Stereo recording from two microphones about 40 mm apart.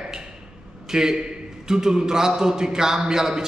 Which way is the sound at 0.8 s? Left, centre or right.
Centre.